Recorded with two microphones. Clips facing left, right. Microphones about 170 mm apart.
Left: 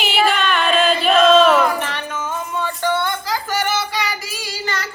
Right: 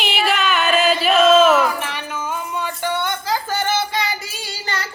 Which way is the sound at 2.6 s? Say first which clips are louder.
Left 4 dB; 15° right (ahead or behind).